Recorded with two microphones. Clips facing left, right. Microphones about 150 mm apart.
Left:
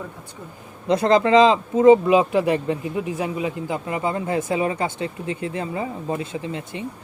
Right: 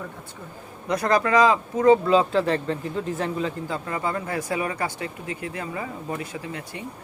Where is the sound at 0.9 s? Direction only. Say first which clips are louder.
Left 5 dB; 25° left (ahead or behind).